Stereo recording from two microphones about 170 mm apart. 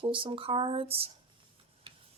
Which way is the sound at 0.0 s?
30° right (ahead or behind).